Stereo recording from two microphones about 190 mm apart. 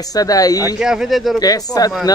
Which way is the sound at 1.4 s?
20° left (ahead or behind).